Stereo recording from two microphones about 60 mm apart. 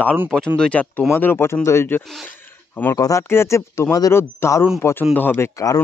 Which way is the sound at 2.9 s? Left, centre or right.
Left.